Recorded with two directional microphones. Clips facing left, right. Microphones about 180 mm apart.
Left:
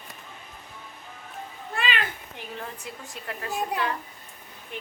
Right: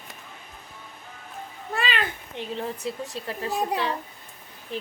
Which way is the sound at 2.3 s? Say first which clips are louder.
Right 6 dB; 30° right (ahead or behind).